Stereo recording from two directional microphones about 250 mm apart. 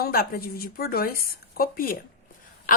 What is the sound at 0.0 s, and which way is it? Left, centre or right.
A woman's voice, left.